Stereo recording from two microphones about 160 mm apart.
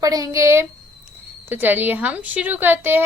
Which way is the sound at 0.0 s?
20° right (ahead or behind).